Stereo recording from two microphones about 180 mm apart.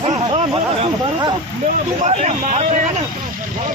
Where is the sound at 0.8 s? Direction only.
25° right (ahead or behind).